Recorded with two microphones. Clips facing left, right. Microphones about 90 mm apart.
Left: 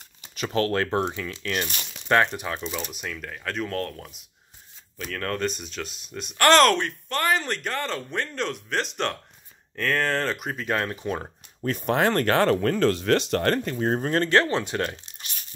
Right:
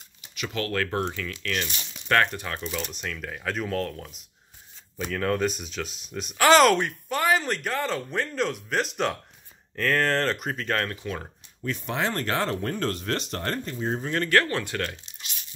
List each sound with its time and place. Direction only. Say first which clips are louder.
0.4 s speech: left 4 dB; 35° left (ahead or behind); by 10.9 s 10° left (ahead or behind)
11.6 s speech: left 6 dB; 50° left (ahead or behind)
14.2 s speech: right 1 dB; 25° left (ahead or behind)